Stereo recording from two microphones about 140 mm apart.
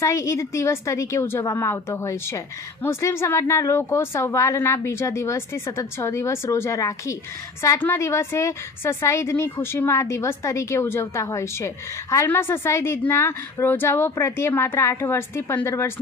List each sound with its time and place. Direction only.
0.0 s a woman's voice: 20° left (ahead or behind)